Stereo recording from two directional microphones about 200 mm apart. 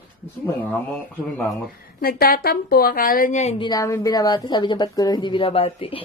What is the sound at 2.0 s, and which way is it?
A woman's voice, 45° left (ahead or behind).